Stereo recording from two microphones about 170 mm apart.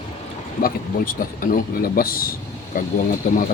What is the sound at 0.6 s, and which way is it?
Speech, 55° left (ahead or behind).